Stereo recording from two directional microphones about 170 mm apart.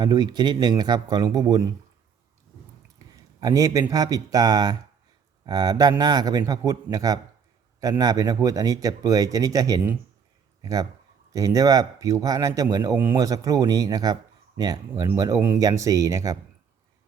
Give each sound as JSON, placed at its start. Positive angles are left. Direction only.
{"t": 0.0, "sound": "speech", "side_deg": -25}
{"t": 3.4, "sound": "speech", "side_deg": -20}